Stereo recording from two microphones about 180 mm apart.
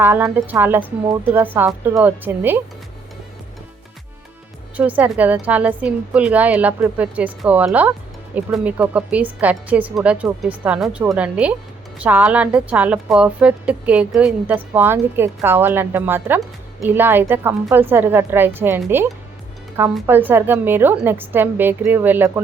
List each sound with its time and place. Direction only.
0.0 s a woman's voice: 10° right (ahead or behind)
4.8 s a woman's voice: 10° right (ahead or behind)
20.1 s a woman's voice: 10° right (ahead or behind)